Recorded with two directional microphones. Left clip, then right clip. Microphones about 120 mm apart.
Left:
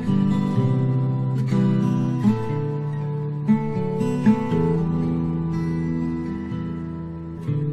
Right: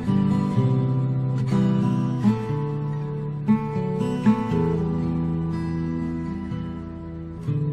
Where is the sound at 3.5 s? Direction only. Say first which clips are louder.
Left 2 dB; 35° right (ahead or behind).